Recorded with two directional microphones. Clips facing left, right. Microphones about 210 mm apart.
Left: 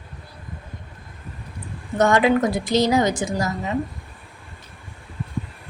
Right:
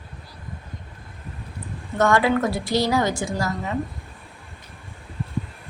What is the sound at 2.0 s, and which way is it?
A woman's voice, 20° left (ahead or behind).